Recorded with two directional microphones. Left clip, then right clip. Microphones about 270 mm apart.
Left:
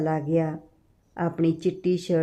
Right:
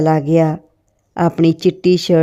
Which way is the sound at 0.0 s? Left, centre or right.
Right.